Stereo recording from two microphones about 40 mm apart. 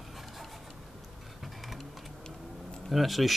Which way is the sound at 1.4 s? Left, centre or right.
Centre.